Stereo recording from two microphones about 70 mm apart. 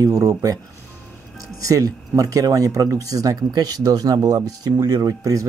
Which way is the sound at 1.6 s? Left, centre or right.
Right.